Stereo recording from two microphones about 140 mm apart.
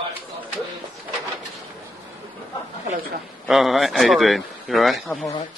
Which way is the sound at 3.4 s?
Centre (ahead or behind).